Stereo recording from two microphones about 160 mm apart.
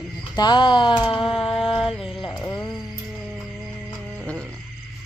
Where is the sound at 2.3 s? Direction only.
20° left (ahead or behind).